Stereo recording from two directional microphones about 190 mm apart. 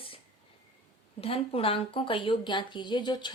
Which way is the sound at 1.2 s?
30° left (ahead or behind).